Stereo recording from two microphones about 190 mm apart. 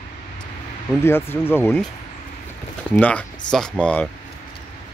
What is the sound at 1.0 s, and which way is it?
Speech, 10° left (ahead or behind).